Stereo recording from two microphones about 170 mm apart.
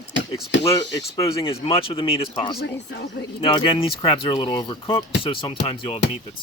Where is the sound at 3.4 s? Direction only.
35° left (ahead or behind).